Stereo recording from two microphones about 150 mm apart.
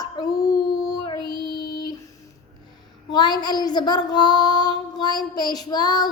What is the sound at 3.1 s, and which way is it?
Child singing, 25° left (ahead or behind).